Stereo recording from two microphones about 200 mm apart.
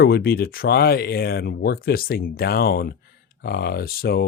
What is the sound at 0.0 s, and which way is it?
Speech, 50° left (ahead or behind).